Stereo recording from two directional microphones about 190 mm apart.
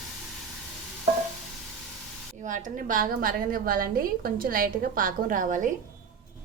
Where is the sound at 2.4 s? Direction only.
40° right (ahead or behind).